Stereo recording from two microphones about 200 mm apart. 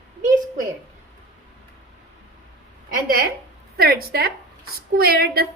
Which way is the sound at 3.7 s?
50° right (ahead or behind).